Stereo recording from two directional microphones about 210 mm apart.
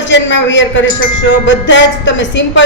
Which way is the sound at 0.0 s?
60° left (ahead or behind).